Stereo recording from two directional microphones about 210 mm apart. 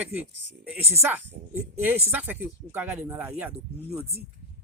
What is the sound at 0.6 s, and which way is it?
Speech, 10° right (ahead or behind).